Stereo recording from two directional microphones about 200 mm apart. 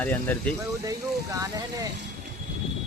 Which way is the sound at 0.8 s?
15° right (ahead or behind).